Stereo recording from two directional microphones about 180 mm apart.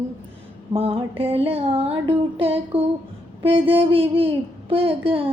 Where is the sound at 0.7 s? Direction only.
35° right (ahead or behind).